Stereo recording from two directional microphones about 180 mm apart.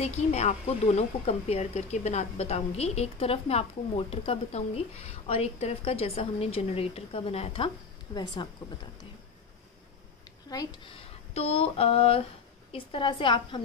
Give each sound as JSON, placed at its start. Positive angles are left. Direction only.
{"t": 0.0, "sound": "a woman's voice", "side_deg": 35}
{"t": 10.5, "sound": "a woman's voice", "side_deg": 20}